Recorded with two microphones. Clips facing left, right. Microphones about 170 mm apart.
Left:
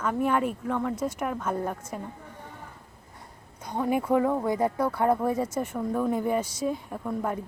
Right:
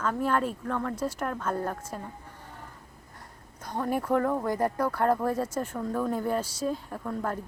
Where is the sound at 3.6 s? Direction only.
10° left (ahead or behind).